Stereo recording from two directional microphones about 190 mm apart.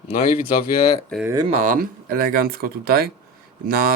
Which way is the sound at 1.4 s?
35° right (ahead or behind).